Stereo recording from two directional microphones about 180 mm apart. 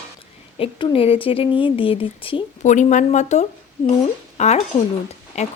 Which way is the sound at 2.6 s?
45° left (ahead or behind).